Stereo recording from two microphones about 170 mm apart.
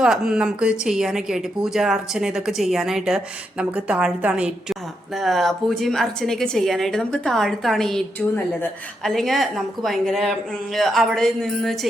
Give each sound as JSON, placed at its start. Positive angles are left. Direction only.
{"t": 0.0, "sound": "a woman's voice", "side_deg": -5}
{"t": 9.0, "sound": "a woman's voice", "side_deg": 0}